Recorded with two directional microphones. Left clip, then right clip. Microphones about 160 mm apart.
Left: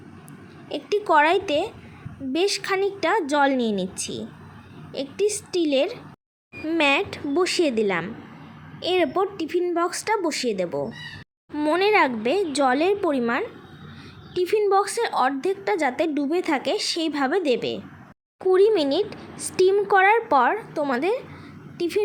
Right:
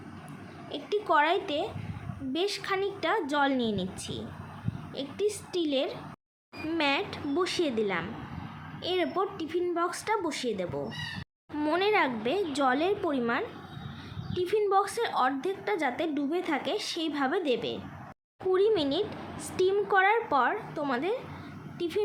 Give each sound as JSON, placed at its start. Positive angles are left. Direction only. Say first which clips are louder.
{"t": 0.7, "sound": "a woman's voice", "louder": "left 7 dB", "side_deg": 35}